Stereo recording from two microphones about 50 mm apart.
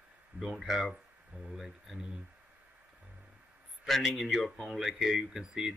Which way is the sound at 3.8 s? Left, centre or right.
Centre.